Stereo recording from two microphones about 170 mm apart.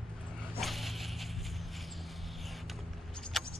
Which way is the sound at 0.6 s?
Centre (ahead or behind).